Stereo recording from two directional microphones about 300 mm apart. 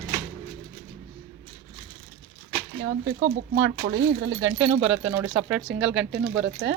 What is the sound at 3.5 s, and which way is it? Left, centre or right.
Speech, right.